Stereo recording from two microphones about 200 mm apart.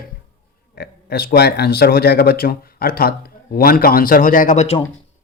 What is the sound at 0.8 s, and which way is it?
Speech, 50° left (ahead or behind).